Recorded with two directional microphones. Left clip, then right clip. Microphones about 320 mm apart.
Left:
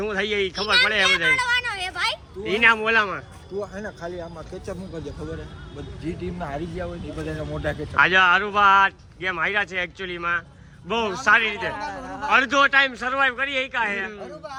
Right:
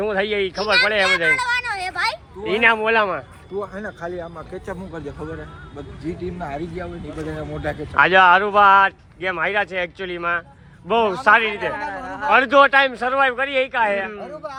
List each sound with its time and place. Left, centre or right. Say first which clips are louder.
0.0 s speech: right 3 dB; centre
3.6 s speech: right 3 dB; centre
6.4 s speech: even; centre
11.9 s a sound: right 4 dB; right
12.3 s speech: right 4 dB; centre